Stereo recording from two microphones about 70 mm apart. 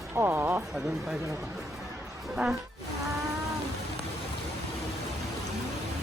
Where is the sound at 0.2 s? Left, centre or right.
Right.